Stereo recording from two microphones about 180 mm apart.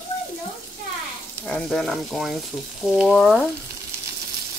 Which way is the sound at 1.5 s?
Centre (ahead or behind).